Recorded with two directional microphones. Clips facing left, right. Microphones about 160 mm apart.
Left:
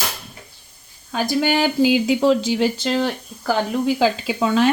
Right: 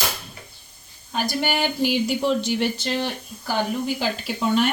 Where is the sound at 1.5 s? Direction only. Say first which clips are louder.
Left 6 dB; 90° left.